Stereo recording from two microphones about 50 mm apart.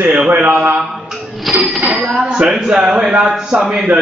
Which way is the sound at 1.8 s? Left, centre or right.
Centre.